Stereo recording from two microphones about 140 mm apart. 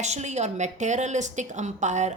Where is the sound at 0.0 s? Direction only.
55° right (ahead or behind).